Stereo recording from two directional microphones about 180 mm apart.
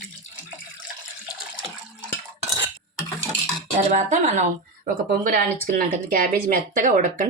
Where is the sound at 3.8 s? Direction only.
40° right (ahead or behind).